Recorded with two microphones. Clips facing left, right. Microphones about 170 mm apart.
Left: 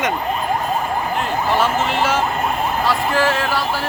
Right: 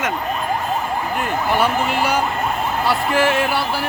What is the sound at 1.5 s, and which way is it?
Speech, 10° right (ahead or behind).